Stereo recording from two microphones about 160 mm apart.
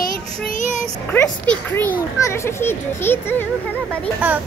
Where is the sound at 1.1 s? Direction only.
10° left (ahead or behind).